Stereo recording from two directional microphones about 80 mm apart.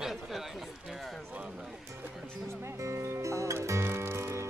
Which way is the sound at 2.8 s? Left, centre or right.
Right.